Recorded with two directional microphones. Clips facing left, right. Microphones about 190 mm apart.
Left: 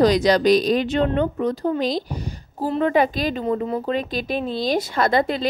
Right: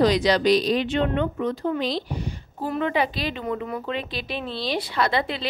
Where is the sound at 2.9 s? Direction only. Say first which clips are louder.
Left 5 dB; 45° left (ahead or behind).